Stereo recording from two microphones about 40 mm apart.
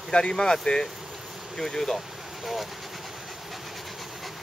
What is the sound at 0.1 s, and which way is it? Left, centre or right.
Speech, left.